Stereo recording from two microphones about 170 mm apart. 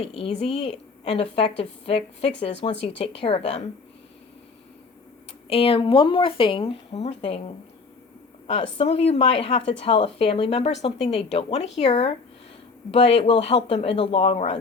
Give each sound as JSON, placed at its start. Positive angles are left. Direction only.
{"t": 0.0, "sound": "speech", "side_deg": 35}
{"t": 5.5, "sound": "speech", "side_deg": 35}